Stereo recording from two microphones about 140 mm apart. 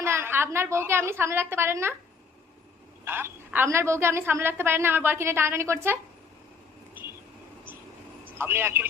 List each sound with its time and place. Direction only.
0.0 s a woman's voice: 15° right (ahead or behind)
3.0 s a woman's voice: 15° right (ahead or behind)
8.4 s a woman's voice: 15° right (ahead or behind)